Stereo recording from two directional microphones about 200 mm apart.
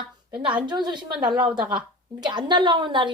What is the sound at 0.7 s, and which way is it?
Speech, 20° right (ahead or behind).